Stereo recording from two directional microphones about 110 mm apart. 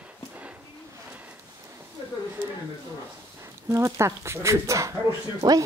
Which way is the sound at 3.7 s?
25° right (ahead or behind).